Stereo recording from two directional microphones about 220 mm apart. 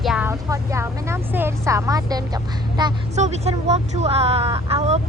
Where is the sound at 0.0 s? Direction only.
5° right (ahead or behind).